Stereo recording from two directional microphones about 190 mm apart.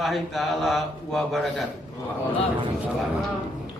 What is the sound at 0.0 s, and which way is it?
Speech, centre (ahead or behind).